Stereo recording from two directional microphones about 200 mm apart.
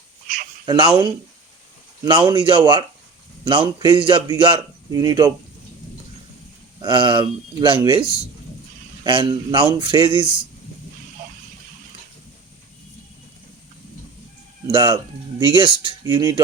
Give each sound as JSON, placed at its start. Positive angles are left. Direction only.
{"t": 0.6, "sound": "a man's voice", "side_deg": -25}
{"t": 6.8, "sound": "a man's voice", "side_deg": -25}
{"t": 9.0, "sound": "a man's voice", "side_deg": -25}
{"t": 14.7, "sound": "a man's voice", "side_deg": -20}